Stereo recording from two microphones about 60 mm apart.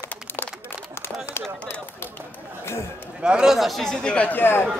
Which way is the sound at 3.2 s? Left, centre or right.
Centre.